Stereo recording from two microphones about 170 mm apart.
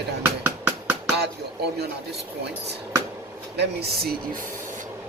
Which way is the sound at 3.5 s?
65° right (ahead or behind).